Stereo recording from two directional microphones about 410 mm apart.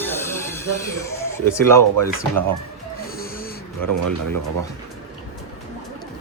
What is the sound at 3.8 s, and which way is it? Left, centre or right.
Speech, right.